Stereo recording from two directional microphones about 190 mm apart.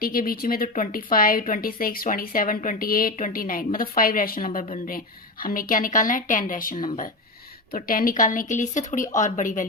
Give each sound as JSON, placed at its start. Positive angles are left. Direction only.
{"t": 0.0, "sound": "a woman's voice", "side_deg": 50}